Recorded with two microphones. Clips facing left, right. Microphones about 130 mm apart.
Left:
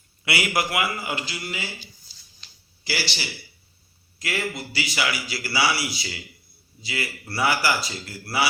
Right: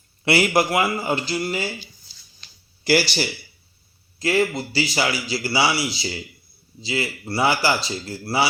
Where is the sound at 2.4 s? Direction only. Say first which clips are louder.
Right 11 dB; 50° right (ahead or behind).